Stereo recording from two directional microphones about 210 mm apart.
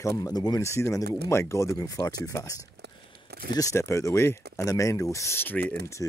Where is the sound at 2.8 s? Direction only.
50° right (ahead or behind).